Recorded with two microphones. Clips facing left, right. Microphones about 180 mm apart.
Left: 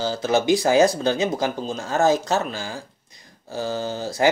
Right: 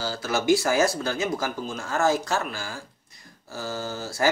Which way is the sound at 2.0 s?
20° left (ahead or behind).